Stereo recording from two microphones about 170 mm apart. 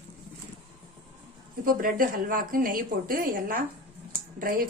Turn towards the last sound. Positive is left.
turn(degrees=-55)  # may be behind; listen again after turning